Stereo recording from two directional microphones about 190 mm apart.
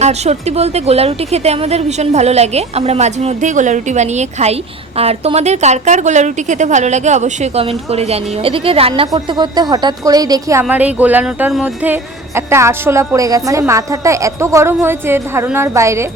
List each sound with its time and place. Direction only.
0.0 s a woman's voice: 35° right (ahead or behind); by 16.0 s 15° right (ahead or behind)